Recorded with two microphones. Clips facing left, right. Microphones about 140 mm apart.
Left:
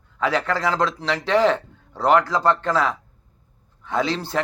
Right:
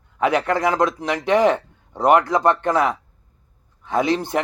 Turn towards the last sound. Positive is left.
turn(degrees=-15)  # may be behind; listen again after turning